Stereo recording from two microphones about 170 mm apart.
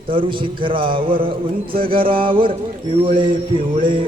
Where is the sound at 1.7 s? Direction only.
60° right (ahead or behind).